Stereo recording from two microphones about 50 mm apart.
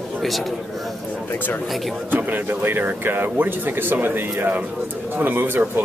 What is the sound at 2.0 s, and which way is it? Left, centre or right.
Speech, right.